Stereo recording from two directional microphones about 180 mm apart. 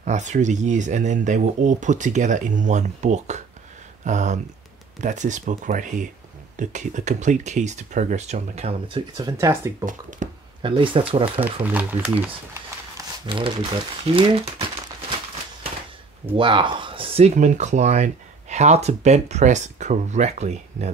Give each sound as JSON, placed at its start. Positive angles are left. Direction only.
{"t": 0.0, "sound": "speech", "side_deg": -40}
{"t": 9.8, "sound": "speech", "side_deg": -45}
{"t": 10.6, "sound": "speech", "side_deg": -30}
{"t": 11.7, "sound": "speech", "side_deg": -10}
{"t": 12.9, "sound": "speech", "side_deg": -30}
{"t": 16.3, "sound": "speech", "side_deg": -25}